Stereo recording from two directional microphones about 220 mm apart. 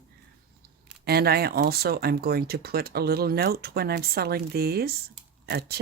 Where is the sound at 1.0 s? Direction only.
45° right (ahead or behind).